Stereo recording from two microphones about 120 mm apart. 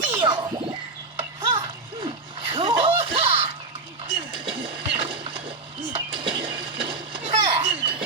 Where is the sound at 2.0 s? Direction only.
45° right (ahead or behind).